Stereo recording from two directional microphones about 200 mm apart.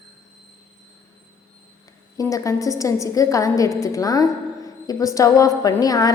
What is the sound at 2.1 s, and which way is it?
A woman's voice, 15° left (ahead or behind).